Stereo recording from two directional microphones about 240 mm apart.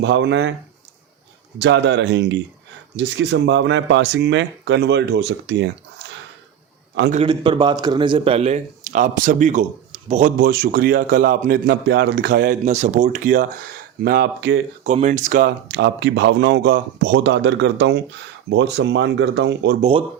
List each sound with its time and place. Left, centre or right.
0.0 s speech: right
1.5 s speech: right
7.1 s speech: right
10.3 s a man's voice: right
14.8 s speech: right
19.8 s speech: right